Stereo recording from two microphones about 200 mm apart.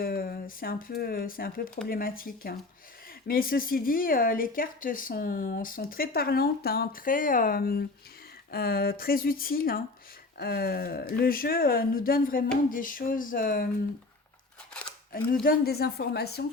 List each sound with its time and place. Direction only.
0.0 s speech: 45° left (ahead or behind)
14.7 s scissors: 5° left (ahead or behind)
15.4 s speech: 50° left (ahead or behind)